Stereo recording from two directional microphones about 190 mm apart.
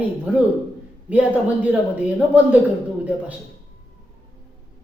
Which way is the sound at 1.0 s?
5° right (ahead or behind).